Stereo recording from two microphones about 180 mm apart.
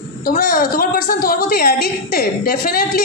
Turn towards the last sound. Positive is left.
turn(degrees=55)  # may be behind; listen again after turning